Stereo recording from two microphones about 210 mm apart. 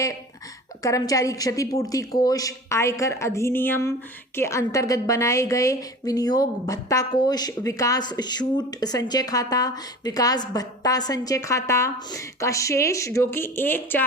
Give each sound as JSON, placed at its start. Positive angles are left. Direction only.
{"t": 0.8, "sound": "speech", "side_deg": 15}